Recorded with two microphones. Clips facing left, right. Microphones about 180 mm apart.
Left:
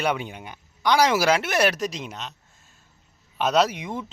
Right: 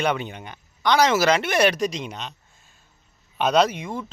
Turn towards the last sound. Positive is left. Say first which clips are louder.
# right 1 dB
turn(degrees=20)  # may be behind; listen again after turning